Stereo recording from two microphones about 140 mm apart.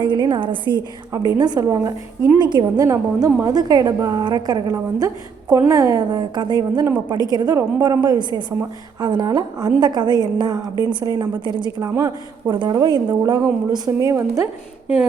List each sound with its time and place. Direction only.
0.0 s a woman's voice: 35° right (ahead or behind)